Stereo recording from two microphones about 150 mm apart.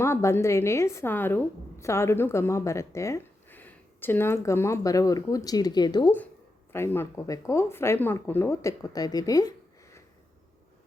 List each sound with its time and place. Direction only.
0.0 s a woman's voice: 20° left (ahead or behind)
6.7 s speech: 15° left (ahead or behind)